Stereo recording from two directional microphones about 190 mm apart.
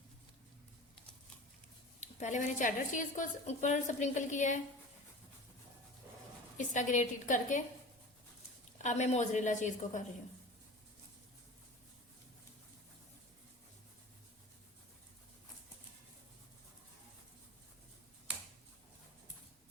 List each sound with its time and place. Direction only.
2.0 s a woman's voice: 40° left (ahead or behind)
6.6 s a woman's voice: 40° left (ahead or behind)
8.8 s a woman's voice: 40° left (ahead or behind)